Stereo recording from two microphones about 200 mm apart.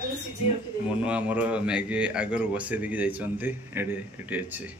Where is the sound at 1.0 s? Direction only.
5° right (ahead or behind).